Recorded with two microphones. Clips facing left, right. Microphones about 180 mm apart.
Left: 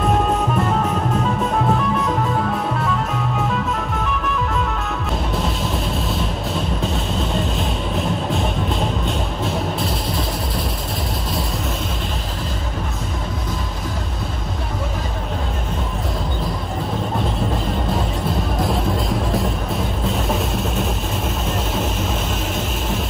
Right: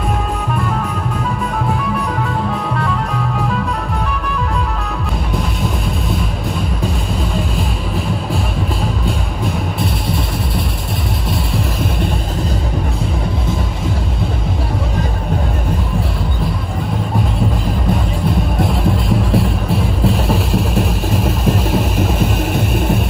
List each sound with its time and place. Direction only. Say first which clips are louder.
9.8 s music: right 3 dB; centre (ahead or behind)
18.6 s music: right 2 dB; centre (ahead or behind)
21.5 s a sound: right 7 dB; 60° right (ahead or behind)